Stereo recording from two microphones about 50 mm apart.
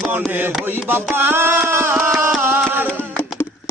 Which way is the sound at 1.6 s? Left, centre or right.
Right.